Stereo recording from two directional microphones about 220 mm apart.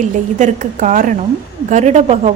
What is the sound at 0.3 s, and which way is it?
A woman's voice, 35° right (ahead or behind).